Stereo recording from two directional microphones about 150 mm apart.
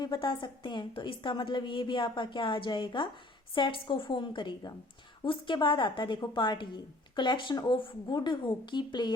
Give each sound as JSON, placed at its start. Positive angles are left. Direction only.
{"t": 0.0, "sound": "a woman's voice", "side_deg": 30}